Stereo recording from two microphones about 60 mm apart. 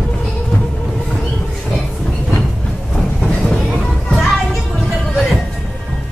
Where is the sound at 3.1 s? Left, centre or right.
Centre.